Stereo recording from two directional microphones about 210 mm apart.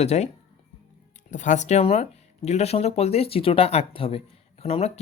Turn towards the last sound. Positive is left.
turn(degrees=30)  # may be behind; listen again after turning